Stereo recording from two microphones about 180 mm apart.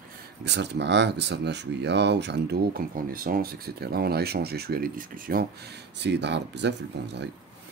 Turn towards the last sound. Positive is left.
turn(degrees=-75)  # may be behind; listen again after turning